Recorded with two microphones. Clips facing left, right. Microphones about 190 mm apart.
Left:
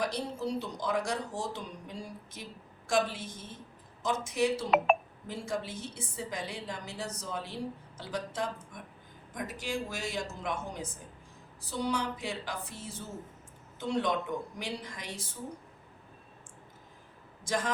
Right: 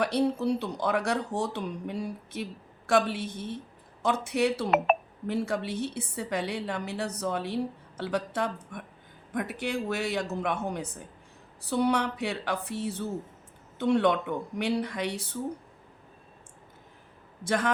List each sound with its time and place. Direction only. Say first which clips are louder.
0.0 s a woman's voice: right 8 dB; 65° right (ahead or behind)
17.4 s a man's voice: right 5 dB; 65° right (ahead or behind)